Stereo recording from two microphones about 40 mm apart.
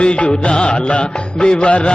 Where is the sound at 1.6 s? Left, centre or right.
Left.